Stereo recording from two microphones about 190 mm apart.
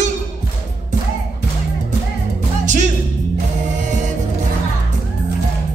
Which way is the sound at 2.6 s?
40° right (ahead or behind).